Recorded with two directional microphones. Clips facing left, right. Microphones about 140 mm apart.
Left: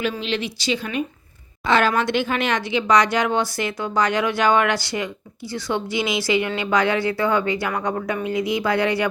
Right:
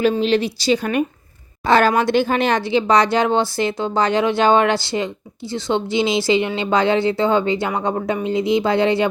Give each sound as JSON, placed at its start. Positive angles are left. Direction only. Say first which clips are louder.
{"t": 0.0, "sound": "speech", "louder": "right 8 dB", "side_deg": -40}